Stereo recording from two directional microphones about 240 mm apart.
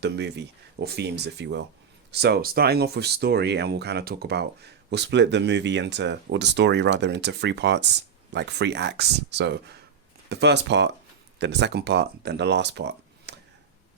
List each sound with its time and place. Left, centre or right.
0.0 s speech: right